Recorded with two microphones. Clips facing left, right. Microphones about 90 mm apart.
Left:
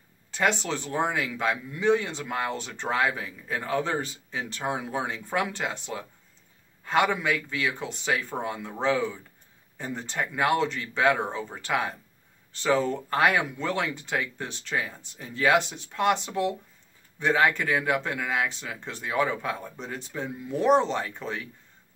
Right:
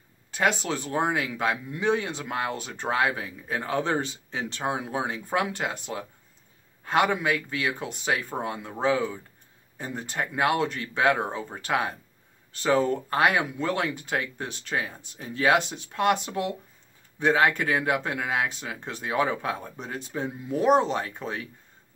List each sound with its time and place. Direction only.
0.3 s a man's voice: 10° right (ahead or behind)